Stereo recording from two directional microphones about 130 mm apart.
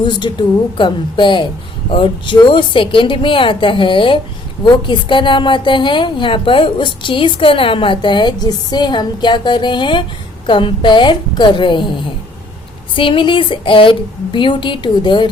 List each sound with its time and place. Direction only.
0.0 s a woman's voice: 35° left (ahead or behind)
13.0 s a woman's voice: 40° left (ahead or behind)